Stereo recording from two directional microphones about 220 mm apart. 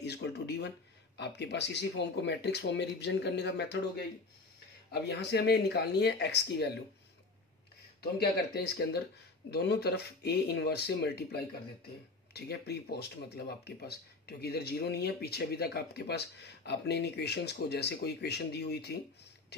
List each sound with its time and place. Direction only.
0.0 s speech: 50° left (ahead or behind)
4.9 s speech: 50° left (ahead or behind)
8.5 s speech: 45° left (ahead or behind)